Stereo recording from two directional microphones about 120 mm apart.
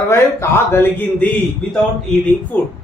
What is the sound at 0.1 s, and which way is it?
A man's voice, 20° left (ahead or behind).